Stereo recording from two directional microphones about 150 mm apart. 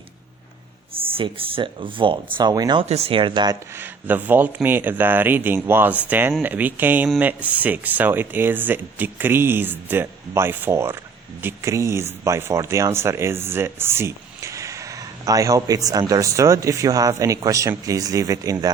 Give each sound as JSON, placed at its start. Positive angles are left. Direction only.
{"t": 1.1, "sound": "speech", "side_deg": -35}
{"t": 2.9, "sound": "speech", "side_deg": -40}
{"t": 3.8, "sound": "speech", "side_deg": -10}